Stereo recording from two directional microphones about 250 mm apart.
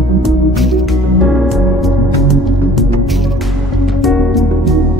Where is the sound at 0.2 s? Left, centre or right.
Centre.